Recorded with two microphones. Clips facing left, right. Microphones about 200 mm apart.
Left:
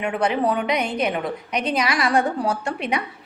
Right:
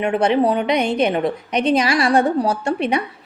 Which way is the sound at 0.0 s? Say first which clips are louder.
Right 5 dB; 25° right (ahead or behind).